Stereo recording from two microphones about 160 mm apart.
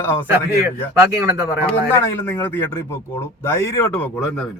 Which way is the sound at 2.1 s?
15° left (ahead or behind).